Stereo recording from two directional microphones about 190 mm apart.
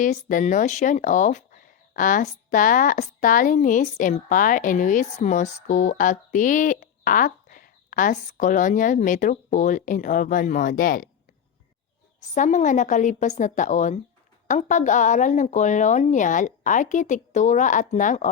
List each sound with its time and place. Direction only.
0.0 s speech: 45° left (ahead or behind)
12.3 s a woman's voice: 40° left (ahead or behind)